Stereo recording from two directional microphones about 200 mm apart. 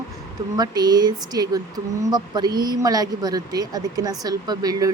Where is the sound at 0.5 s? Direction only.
20° right (ahead or behind).